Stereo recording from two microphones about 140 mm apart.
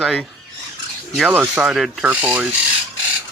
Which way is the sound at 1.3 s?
10° right (ahead or behind).